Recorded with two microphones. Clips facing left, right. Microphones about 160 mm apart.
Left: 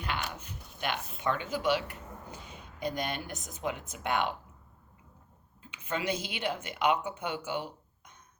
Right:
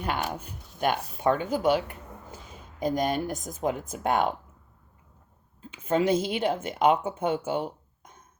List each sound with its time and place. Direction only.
0.0 s speech: 45° right (ahead or behind)
5.7 s speech: 45° right (ahead or behind)
7.2 s a sound: 45° right (ahead or behind)